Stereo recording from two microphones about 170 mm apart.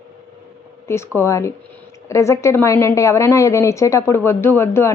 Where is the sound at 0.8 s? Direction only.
15° left (ahead or behind).